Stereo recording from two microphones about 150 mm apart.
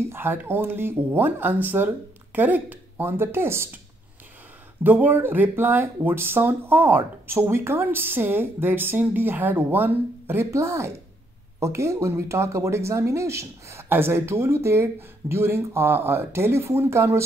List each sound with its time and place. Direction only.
0.1 s speech: 15° right (ahead or behind)
4.8 s speech: 10° right (ahead or behind)